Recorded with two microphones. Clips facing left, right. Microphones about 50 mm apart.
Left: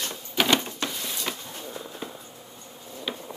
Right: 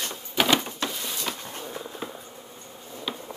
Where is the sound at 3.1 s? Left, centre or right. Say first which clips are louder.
Even; centre.